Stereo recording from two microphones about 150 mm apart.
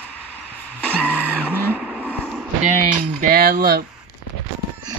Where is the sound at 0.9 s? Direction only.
10° left (ahead or behind).